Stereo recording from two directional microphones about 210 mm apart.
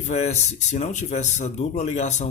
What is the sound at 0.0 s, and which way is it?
Speech, 30° left (ahead or behind).